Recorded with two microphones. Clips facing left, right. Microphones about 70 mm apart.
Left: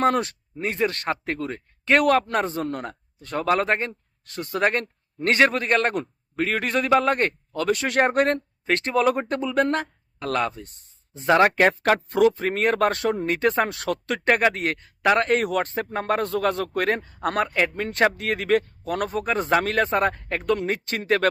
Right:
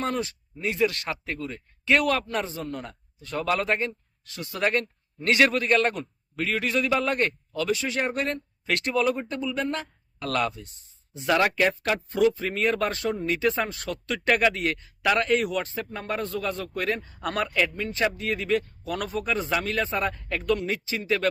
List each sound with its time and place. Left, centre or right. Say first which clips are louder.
0.0 s speech: left 7 dB; left
8.6 s speech: left 3 dB; left
10.2 s speech: left 2 dB; left
10.6 s speech: left 4 dB; left
14.3 s speech: left 2 dB; left
15.0 s speech: left 3 dB; left
17.7 s speech: left 5 dB; left